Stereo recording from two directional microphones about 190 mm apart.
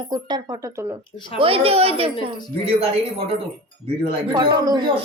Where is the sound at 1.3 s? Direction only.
30° right (ahead or behind).